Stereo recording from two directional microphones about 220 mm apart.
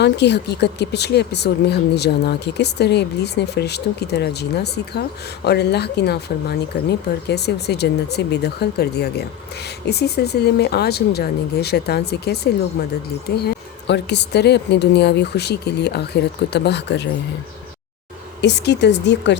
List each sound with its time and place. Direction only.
0.0 s speech: 50° left (ahead or behind)
18.4 s speech: 50° left (ahead or behind)